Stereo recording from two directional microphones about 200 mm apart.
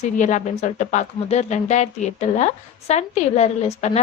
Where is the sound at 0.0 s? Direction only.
40° left (ahead or behind).